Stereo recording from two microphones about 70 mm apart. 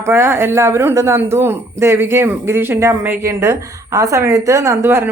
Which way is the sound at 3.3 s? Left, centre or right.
Right.